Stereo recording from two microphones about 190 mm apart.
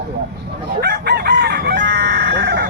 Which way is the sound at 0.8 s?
60° right (ahead or behind).